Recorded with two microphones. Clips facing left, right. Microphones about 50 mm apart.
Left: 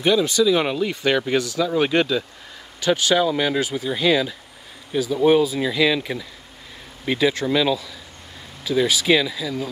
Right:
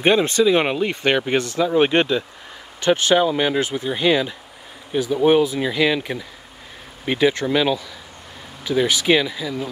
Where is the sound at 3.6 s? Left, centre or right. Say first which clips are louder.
Right 1 dB; right.